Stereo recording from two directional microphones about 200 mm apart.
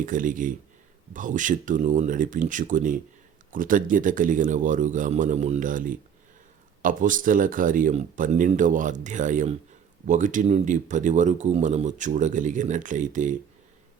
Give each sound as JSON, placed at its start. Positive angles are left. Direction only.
{"t": 0.0, "sound": "speech", "side_deg": -40}